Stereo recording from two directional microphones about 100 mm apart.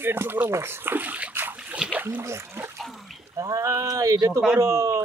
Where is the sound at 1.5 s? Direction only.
10° right (ahead or behind).